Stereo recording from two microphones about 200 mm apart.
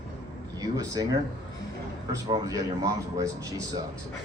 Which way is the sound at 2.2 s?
20° right (ahead or behind).